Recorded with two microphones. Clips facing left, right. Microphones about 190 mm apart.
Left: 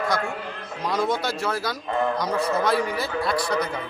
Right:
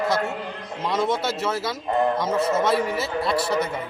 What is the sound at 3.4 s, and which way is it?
Music, 25° right (ahead or behind).